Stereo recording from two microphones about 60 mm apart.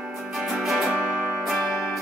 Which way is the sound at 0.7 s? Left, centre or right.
Centre.